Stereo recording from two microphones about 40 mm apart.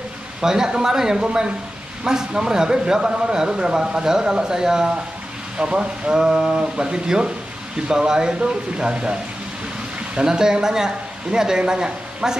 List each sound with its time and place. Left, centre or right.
0.4 s speech: centre
10.2 s speech: centre